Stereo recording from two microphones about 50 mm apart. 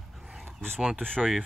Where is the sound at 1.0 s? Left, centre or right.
Centre.